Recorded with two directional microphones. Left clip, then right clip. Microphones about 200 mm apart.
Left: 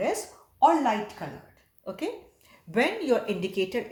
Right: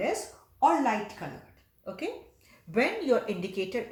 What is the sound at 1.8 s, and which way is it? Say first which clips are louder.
Speech: left 2 dB; 35° left (ahead or behind).